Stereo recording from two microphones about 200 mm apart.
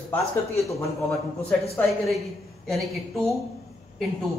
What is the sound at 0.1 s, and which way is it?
Speech, 15° left (ahead or behind).